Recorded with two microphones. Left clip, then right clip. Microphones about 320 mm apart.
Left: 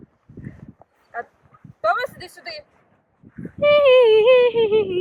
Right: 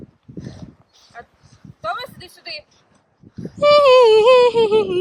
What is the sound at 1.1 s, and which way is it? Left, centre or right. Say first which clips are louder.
Speech: left 8 dB; centre.